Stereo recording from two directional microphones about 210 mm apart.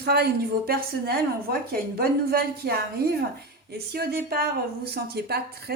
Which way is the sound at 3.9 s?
50° right (ahead or behind).